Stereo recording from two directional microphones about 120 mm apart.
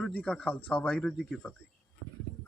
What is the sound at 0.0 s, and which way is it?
Speech, 10° left (ahead or behind).